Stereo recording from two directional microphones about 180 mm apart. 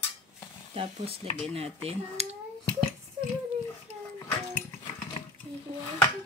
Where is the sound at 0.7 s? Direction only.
30° right (ahead or behind).